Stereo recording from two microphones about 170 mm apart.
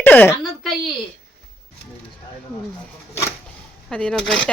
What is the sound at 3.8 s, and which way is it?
Speech, 5° left (ahead or behind).